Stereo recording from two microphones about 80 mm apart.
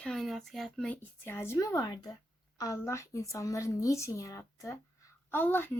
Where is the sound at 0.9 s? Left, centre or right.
Left.